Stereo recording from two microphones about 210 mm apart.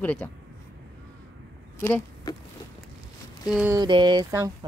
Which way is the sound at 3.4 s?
10° right (ahead or behind).